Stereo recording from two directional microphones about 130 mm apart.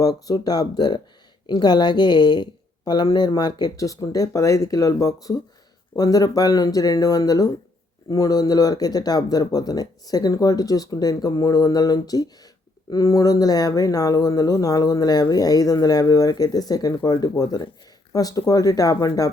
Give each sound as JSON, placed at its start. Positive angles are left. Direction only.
{"t": 0.0, "sound": "a woman's voice", "side_deg": 30}